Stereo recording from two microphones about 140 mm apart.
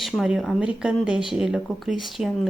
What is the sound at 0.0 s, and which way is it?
Speech, centre (ahead or behind).